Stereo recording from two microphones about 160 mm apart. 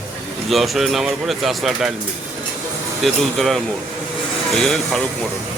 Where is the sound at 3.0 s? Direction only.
Centre (ahead or behind).